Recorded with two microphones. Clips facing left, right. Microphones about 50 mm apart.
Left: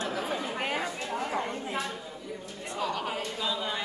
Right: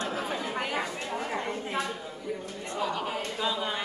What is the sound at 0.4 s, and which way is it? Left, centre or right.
Chatter, left.